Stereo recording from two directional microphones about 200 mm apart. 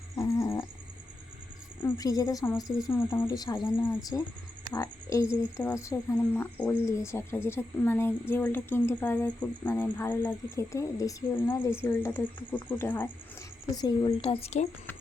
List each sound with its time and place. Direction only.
0.2 s cat: 15° left (ahead or behind)
1.8 s a woman's voice: 20° left (ahead or behind)